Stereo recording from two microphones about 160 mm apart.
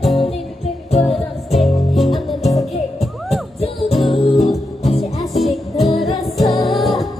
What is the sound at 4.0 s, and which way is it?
Music, centre (ahead or behind).